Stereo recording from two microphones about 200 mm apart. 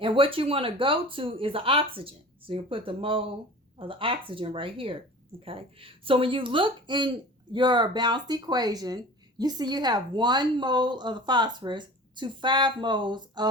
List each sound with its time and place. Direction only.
0.0 s a woman's voice: 25° right (ahead or behind)